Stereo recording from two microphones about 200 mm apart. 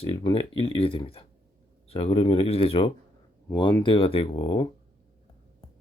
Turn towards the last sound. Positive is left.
turn(degrees=25)  # may be behind; listen again after turning